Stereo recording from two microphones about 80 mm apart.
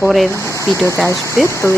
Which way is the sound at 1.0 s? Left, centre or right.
Left.